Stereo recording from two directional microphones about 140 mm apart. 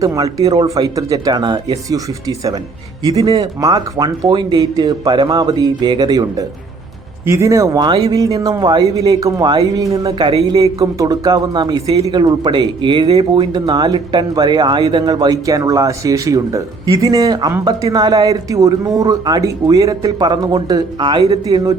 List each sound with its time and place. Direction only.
0.0 s speech: 25° right (ahead or behind)